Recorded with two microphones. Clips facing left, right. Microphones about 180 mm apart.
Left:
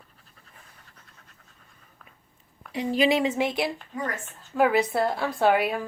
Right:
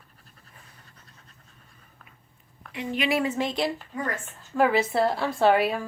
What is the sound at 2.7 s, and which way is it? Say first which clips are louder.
Speech: left 6 dB; 35° left (ahead or behind).